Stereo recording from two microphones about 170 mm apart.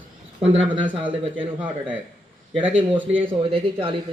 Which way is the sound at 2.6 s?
10° right (ahead or behind).